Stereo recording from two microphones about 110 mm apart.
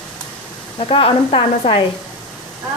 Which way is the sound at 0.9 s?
55° left (ahead or behind).